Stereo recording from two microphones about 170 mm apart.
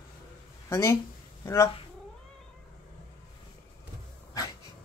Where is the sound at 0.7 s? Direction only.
15° left (ahead or behind).